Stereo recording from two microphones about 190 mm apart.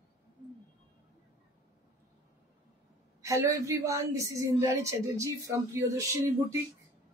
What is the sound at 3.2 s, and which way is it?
A woman's voice, 15° right (ahead or behind).